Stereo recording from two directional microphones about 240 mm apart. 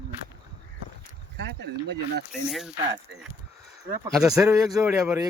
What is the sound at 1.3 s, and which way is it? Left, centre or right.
Speech, right.